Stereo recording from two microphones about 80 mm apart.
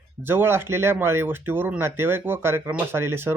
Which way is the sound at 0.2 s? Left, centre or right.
Right.